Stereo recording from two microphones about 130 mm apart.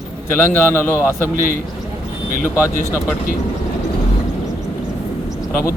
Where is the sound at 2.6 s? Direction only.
20° left (ahead or behind).